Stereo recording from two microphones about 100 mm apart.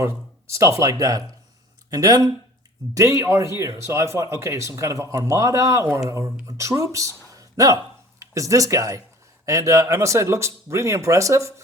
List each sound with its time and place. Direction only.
0.0 s speech: 30° right (ahead or behind)
7.3 s a sound: 35° right (ahead or behind)
8.2 s speech: 30° right (ahead or behind)